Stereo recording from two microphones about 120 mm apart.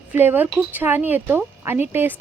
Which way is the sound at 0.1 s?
15° right (ahead or behind).